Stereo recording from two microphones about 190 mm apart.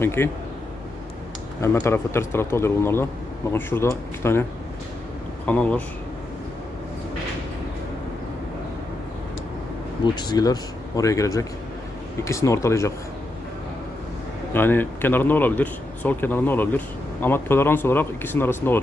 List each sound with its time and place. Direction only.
0.0 s a man's voice: 10° left (ahead or behind)
1.6 s a man's voice: 15° left (ahead or behind)
5.5 s a man's voice: 5° left (ahead or behind)
10.0 s a man's voice: 20° left (ahead or behind)
14.5 s a man's voice: 10° left (ahead or behind)